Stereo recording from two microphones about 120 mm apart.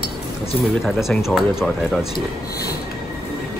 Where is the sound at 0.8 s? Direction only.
Centre (ahead or behind).